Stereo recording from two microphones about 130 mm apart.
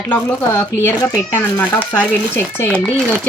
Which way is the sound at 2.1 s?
15° left (ahead or behind).